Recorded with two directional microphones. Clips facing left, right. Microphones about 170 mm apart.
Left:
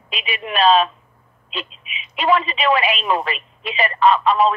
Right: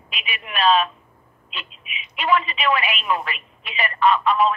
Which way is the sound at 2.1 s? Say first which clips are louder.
Left 3 dB; 35° left (ahead or behind).